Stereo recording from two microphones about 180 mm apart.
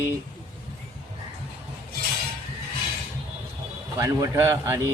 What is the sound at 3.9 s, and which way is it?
Speech, 15° right (ahead or behind).